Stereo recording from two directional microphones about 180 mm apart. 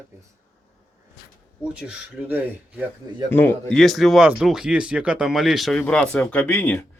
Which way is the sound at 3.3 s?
10° left (ahead or behind).